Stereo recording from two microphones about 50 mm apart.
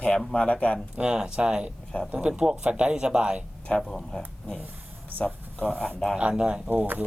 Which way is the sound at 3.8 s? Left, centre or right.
Centre.